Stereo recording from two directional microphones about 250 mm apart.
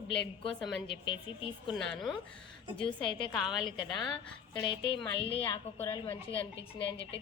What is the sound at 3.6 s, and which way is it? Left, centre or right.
A woman's voice, centre.